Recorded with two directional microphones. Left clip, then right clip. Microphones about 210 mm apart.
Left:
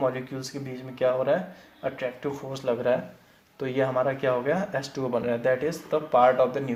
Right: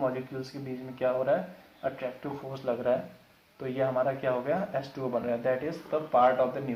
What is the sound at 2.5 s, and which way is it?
Speech, 45° left (ahead or behind).